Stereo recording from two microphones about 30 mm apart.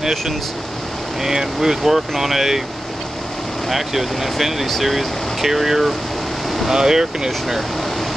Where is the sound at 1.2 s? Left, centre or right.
Centre.